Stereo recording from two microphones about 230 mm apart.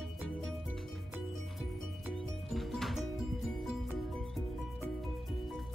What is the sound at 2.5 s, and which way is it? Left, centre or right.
Music, centre.